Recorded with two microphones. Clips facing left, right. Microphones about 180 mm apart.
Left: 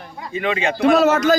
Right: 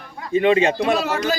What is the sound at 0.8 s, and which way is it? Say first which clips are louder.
Speech: left 6 dB; 45° left (ahead or behind).